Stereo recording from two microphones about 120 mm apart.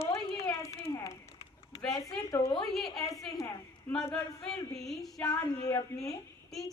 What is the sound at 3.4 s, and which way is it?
Speech, 25° left (ahead or behind).